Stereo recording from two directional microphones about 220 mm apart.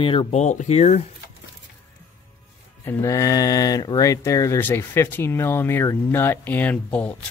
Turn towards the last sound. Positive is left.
turn(degrees=5)  # may be behind; listen again after turning